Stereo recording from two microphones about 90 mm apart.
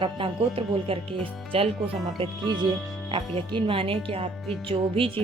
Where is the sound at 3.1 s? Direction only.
65° right (ahead or behind); by 5.1 s 85° right.